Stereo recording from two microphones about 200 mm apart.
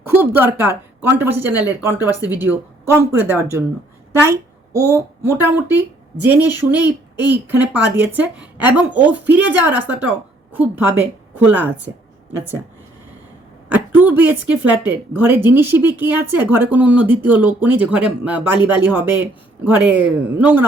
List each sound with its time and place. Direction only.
0.0 s a woman's voice: 10° right (ahead or behind)
6.7 s speech: 20° left (ahead or behind)
7.4 s speech: 10° right (ahead or behind)
13.7 s speech: 10° right (ahead or behind)